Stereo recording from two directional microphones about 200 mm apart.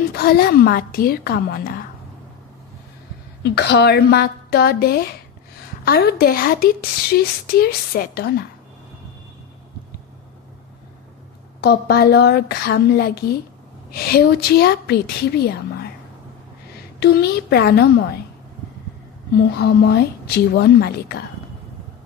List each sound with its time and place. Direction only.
0.1 s speech: 50° left (ahead or behind)
3.4 s speech: 55° left (ahead or behind)
11.6 s a woman's voice: 50° left (ahead or behind)
19.5 s speech: 55° left (ahead or behind)